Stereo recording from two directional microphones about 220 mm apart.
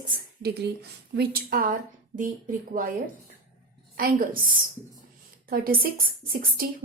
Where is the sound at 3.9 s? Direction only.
40° right (ahead or behind).